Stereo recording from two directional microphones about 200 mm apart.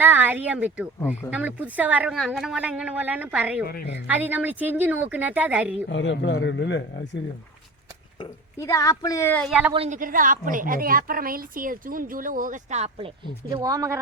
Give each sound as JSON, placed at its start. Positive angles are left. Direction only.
{"t": 0.0, "sound": "a woman's voice", "side_deg": -10}
{"t": 3.7, "sound": "a woman's voice", "side_deg": 50}
{"t": 4.0, "sound": "a woman's voice", "side_deg": -10}
{"t": 5.9, "sound": "a man's voice", "side_deg": 65}
{"t": 8.6, "sound": "speech", "side_deg": 15}
{"t": 9.5, "sound": "a woman's voice", "side_deg": -5}
{"t": 9.7, "sound": "a woman's voice", "side_deg": -35}
{"t": 13.5, "sound": "a woman's voice", "side_deg": -20}